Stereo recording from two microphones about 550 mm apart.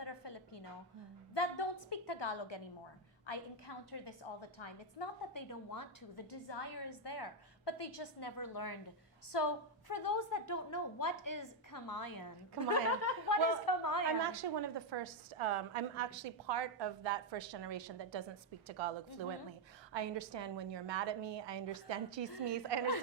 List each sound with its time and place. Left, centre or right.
0.0 s a sound: left
1.3 s a woman's voice: left
5.3 s a woman's voice: left
14.2 s a woman's voice: right